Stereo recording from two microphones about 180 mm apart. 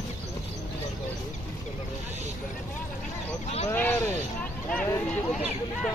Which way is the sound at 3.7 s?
10° left (ahead or behind).